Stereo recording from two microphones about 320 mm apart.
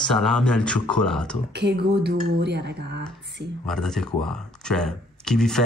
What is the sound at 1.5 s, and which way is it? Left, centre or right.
Speech, right.